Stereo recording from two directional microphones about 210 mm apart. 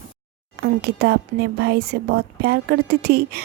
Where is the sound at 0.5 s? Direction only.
50° right (ahead or behind).